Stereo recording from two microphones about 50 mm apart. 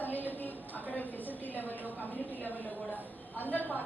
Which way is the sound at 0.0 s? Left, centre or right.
Left.